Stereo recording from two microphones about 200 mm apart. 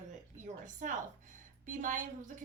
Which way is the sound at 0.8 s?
40° right (ahead or behind).